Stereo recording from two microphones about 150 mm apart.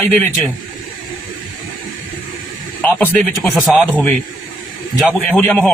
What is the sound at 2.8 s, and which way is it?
Speech, 10° left (ahead or behind).